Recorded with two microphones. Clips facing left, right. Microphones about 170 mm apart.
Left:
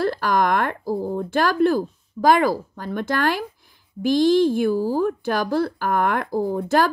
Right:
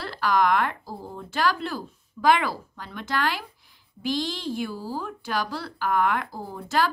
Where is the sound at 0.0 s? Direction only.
50° left (ahead or behind).